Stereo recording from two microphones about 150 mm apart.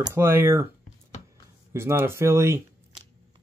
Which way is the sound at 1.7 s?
20° right (ahead or behind).